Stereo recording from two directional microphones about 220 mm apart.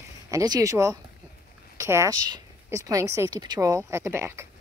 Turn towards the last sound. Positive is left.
turn(degrees=-10)  # may be behind; listen again after turning